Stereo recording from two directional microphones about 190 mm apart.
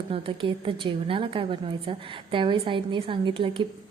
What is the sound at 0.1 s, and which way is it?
A woman's voice, 30° right (ahead or behind).